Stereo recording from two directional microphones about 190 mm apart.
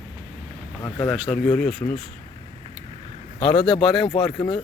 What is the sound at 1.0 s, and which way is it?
Speech, 5° right (ahead or behind).